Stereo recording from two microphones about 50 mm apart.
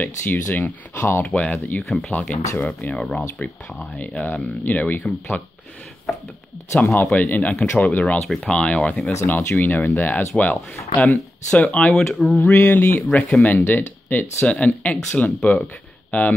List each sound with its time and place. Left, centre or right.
0.0 s speech: left
1.2 s speech: left
1.9 s speech: centre
2.1 s speech: left
4.0 s speech: left
6.8 s speech: left
8.5 s speech: centre
9.2 s speech: left
12.2 s a sound: centre
12.5 s speech: left
14.4 s speech: centre